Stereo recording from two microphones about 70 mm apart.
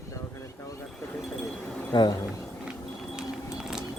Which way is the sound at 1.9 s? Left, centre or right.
Left.